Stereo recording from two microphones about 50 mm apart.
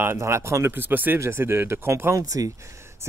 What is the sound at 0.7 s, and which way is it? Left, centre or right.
Speech, right.